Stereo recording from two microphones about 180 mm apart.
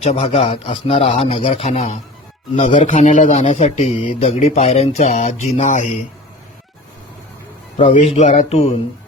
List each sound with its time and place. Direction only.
0.0 s speech: 35° left (ahead or behind)
7.8 s speech: 35° left (ahead or behind)